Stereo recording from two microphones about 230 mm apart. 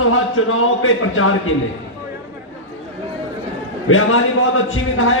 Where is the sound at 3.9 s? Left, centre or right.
Left.